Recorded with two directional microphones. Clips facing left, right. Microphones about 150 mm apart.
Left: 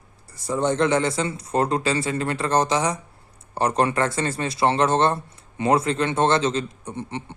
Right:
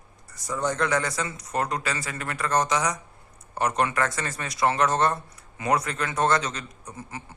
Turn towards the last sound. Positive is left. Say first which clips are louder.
# left 7 dB
turn(degrees=30)  # may be behind; listen again after turning